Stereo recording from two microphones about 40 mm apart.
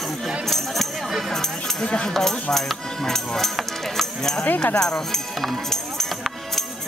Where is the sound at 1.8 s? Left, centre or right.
Left.